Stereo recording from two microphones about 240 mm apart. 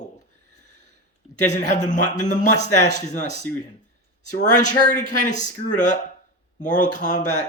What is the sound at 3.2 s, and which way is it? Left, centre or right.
Speech, right.